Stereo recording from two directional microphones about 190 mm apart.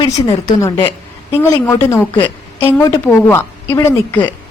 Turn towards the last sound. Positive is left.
turn(degrees=10)  # may be behind; listen again after turning